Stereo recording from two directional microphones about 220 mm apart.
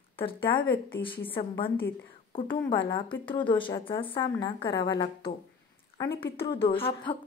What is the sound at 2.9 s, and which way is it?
A woman's voice, 20° left (ahead or behind).